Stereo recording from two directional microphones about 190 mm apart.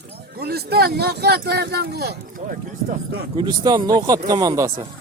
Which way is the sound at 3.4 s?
20° right (ahead or behind).